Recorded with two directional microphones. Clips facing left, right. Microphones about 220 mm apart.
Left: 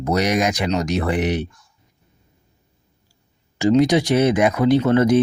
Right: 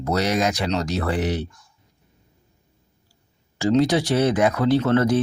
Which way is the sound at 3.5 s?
15° left (ahead or behind).